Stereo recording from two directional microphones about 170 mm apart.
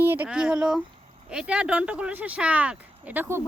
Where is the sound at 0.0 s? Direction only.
10° right (ahead or behind).